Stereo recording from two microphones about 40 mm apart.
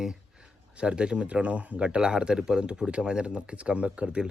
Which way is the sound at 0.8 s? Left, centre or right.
Right.